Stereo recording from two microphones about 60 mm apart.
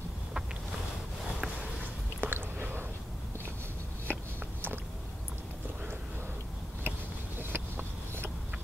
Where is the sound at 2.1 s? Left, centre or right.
Right.